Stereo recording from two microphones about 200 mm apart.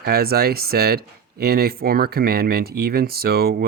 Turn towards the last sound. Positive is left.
turn(degrees=-50)  # may be behind; listen again after turning